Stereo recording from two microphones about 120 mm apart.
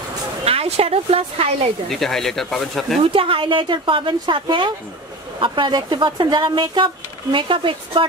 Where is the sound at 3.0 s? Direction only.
50° right (ahead or behind).